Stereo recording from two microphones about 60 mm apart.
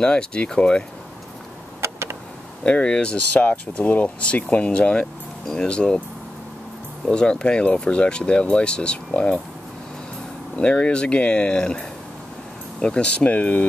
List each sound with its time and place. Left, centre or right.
0.0 s speech: centre
1.8 s a sound: right
2.6 s speech: centre
7.1 s speech: centre
10.5 s speech: centre